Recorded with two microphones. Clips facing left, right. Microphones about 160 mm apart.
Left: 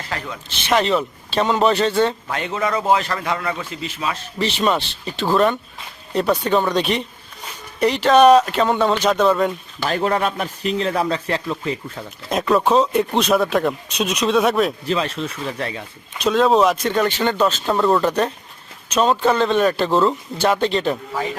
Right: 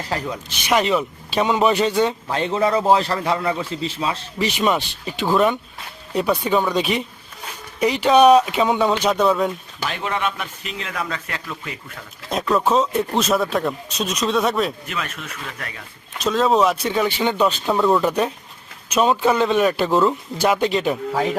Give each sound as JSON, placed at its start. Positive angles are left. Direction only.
{"t": 0.3, "sound": "a man's voice", "side_deg": -10}
{"t": 2.3, "sound": "a man's voice", "side_deg": -30}
{"t": 4.4, "sound": "a man's voice", "side_deg": -10}
{"t": 9.8, "sound": "a man's voice", "side_deg": 40}
{"t": 12.3, "sound": "a man's voice", "side_deg": 0}
{"t": 14.8, "sound": "speech", "side_deg": 30}
{"t": 16.1, "sound": "a man's voice", "side_deg": 0}